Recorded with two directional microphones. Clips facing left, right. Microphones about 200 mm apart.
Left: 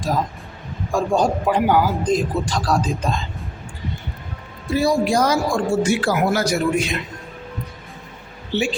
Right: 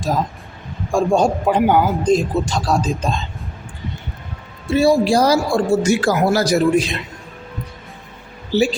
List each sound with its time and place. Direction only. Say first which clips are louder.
0.9 s speech: right 3 dB; 25° right (ahead or behind)
4.7 s speech: right 4 dB; 30° right (ahead or behind)
8.5 s speech: right 6 dB; 35° right (ahead or behind)